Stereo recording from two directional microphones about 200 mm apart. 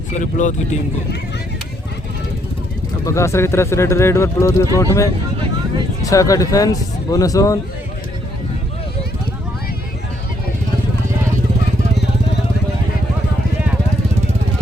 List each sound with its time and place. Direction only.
0.2 s speech: 40° left (ahead or behind)
3.0 s speech: 15° left (ahead or behind)